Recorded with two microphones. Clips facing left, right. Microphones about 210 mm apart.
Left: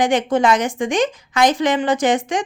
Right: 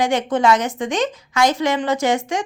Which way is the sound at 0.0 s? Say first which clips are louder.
Left 1 dB; 15° left (ahead or behind).